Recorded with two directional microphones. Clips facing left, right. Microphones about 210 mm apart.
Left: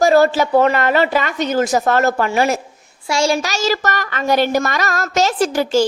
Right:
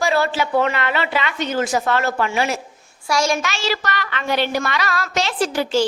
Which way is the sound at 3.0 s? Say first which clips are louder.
Left 3 dB; 30° left (ahead or behind).